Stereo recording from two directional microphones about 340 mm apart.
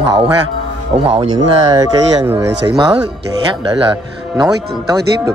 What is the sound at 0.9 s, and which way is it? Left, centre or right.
Speech, centre.